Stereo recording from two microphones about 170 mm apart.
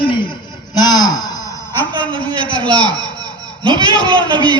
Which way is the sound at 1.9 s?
30° right (ahead or behind).